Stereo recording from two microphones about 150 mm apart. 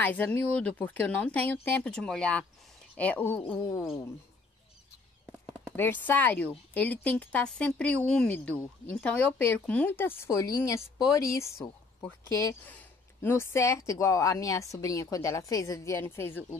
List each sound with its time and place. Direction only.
0.0 s speech: 10° left (ahead or behind)
5.8 s speech: 10° left (ahead or behind)